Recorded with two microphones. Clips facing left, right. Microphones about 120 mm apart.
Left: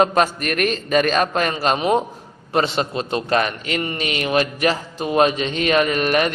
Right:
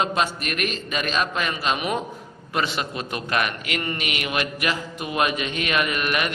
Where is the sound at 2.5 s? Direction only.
30° left (ahead or behind).